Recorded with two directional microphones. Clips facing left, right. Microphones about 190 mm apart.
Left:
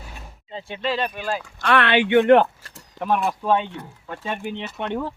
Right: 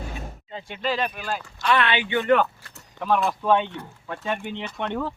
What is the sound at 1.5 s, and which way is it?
Speech, 60° left (ahead or behind).